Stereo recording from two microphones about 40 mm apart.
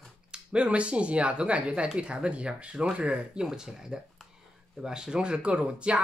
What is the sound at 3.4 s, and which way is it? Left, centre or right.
Speech, centre.